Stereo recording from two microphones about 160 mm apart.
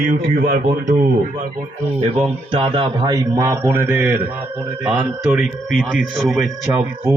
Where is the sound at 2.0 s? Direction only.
40° right (ahead or behind); by 4.2 s 10° right (ahead or behind).